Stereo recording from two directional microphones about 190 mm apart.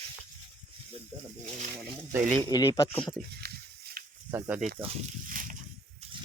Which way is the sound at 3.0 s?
5° left (ahead or behind).